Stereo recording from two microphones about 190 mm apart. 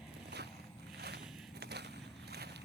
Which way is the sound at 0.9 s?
60° right (ahead or behind).